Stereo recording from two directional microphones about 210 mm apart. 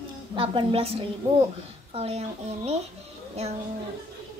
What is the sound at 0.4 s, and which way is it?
A woman's voice, 25° right (ahead or behind).